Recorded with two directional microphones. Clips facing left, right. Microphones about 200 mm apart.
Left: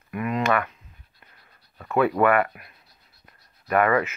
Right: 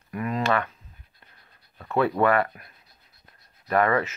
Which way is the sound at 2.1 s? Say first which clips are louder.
Left 1 dB; 35° right (ahead or behind).